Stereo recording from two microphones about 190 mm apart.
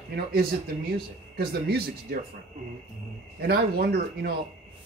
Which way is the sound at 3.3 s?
55° right (ahead or behind).